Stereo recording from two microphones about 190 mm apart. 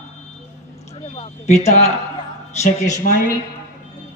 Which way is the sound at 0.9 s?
35° left (ahead or behind).